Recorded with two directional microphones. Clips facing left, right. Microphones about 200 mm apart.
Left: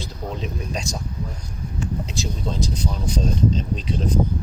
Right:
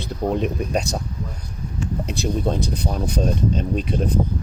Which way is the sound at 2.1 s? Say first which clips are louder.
Right 6 dB; 55° right (ahead or behind).